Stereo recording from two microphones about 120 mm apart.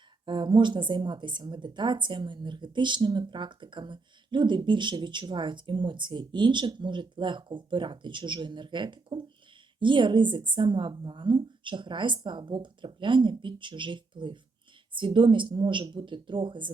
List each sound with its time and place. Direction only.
0.3 s a woman's voice: 40° right (ahead or behind)